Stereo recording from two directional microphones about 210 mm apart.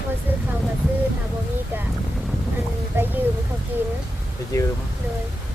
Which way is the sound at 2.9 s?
10° right (ahead or behind).